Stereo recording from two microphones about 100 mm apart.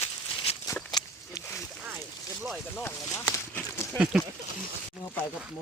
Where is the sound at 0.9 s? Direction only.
45° left (ahead or behind).